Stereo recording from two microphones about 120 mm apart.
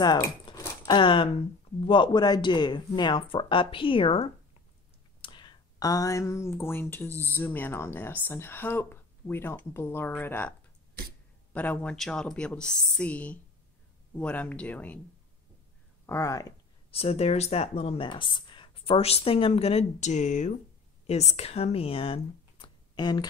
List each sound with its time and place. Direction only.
0.0 s speech: 35° left (ahead or behind); by 7.1 s 20° left (ahead or behind)
7.1 s speech: 20° right (ahead or behind)
7.3 s speech: 15° left (ahead or behind)
11.5 s speech: 10° left (ahead or behind)
16.1 s speech: 25° left (ahead or behind)
16.9 s speech: 55° left (ahead or behind); by 20.5 s 90° left
21.1 s speech: 65° left (ahead or behind)
22.9 s speech: 35° left (ahead or behind)